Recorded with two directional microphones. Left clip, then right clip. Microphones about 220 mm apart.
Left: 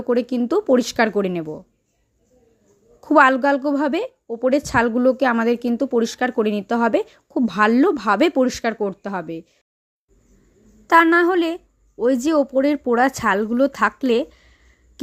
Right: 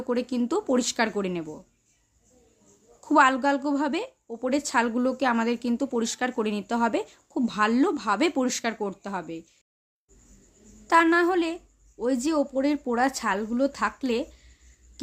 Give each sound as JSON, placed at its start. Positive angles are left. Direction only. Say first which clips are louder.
{"t": 0.1, "sound": "a woman's voice", "louder": "left 8 dB", "side_deg": 25}
{"t": 3.0, "sound": "a woman's voice", "louder": "left 6 dB", "side_deg": 25}
{"t": 10.8, "sound": "speech", "louder": "left 6 dB", "side_deg": 25}